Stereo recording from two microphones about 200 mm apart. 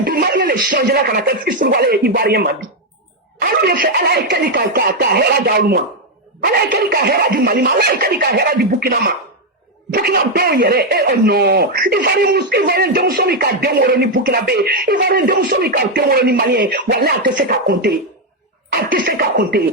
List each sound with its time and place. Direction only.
0.0 s speech: 50° right (ahead or behind)